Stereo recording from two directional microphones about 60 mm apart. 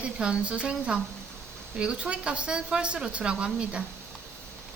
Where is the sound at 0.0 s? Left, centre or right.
Centre.